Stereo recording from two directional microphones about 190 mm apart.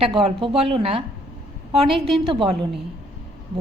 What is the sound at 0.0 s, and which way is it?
A woman's voice, 30° right (ahead or behind).